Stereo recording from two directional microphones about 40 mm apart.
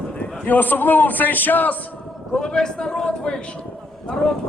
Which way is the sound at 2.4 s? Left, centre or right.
Centre.